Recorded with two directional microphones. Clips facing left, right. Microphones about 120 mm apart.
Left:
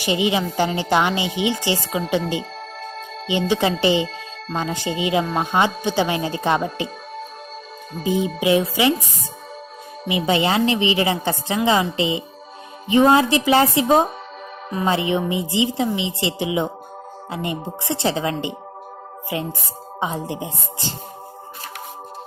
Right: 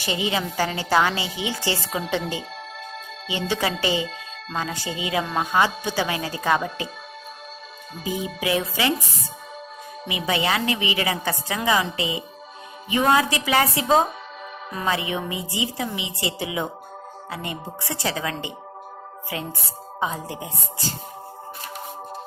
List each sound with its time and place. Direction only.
0.0 s a woman's voice: 15° left (ahead or behind)
3.2 s speech: 20° left (ahead or behind)
8.0 s speech: 25° left (ahead or behind)
10.1 s speech: 30° left (ahead or behind)